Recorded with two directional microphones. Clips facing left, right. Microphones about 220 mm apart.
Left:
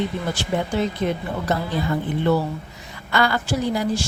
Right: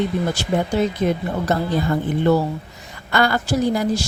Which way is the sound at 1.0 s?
40° right (ahead or behind).